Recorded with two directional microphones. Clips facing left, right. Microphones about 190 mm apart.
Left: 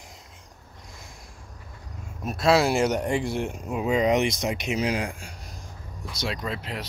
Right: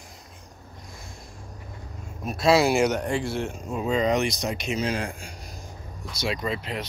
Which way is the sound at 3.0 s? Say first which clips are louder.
Left 1 dB; 20° left (ahead or behind).